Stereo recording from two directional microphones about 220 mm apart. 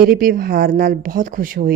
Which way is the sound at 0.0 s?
40° right (ahead or behind).